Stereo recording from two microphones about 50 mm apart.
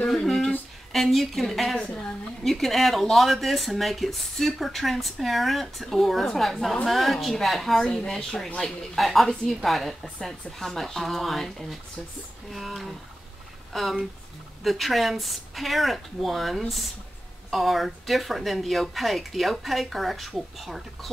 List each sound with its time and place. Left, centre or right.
0.1 s speech: centre
7.8 s speech: centre